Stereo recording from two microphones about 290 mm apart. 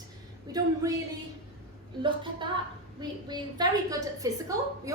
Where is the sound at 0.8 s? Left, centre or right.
Centre.